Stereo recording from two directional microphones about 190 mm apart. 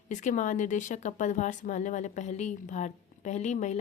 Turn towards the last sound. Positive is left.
turn(degrees=35)  # may be behind; listen again after turning